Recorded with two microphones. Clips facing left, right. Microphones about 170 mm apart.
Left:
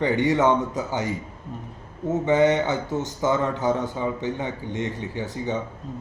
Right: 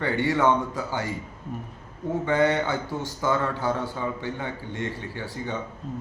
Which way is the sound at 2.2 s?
20° left (ahead or behind).